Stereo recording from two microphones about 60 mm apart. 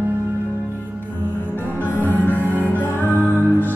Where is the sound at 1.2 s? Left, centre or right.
Left.